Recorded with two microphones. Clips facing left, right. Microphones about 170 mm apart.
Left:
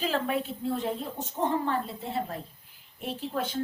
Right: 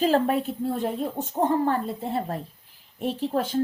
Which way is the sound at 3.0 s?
45° right (ahead or behind).